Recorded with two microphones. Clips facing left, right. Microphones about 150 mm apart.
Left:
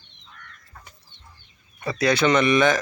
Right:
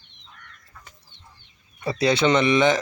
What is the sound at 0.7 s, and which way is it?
Chicken, 50° left (ahead or behind).